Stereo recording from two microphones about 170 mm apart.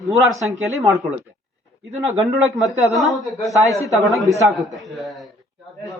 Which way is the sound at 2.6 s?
20° left (ahead or behind).